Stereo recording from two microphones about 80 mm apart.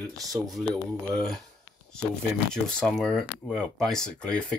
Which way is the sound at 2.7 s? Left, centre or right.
Centre.